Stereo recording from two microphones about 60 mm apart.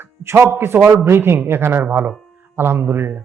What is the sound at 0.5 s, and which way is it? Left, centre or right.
A man's voice, right.